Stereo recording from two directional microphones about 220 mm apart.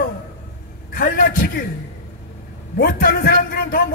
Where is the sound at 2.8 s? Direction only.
40° left (ahead or behind).